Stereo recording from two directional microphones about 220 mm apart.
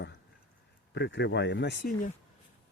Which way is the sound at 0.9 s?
50° left (ahead or behind).